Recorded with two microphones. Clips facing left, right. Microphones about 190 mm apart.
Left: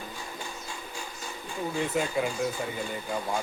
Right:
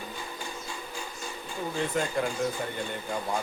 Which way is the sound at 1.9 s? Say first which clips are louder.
Left 1 dB; 5° left (ahead or behind).